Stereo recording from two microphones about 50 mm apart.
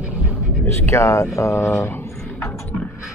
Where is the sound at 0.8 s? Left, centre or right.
Left.